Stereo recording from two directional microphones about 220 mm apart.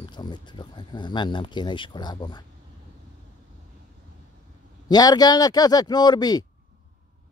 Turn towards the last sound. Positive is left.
turn(degrees=20)  # may be behind; listen again after turning